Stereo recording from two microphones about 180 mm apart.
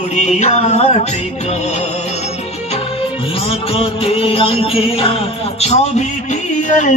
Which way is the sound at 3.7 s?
30° left (ahead or behind).